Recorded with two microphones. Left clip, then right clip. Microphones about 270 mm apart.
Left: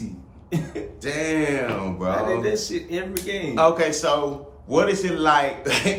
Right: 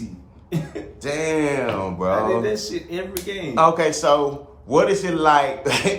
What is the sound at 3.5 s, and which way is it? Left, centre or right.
A man's voice, right.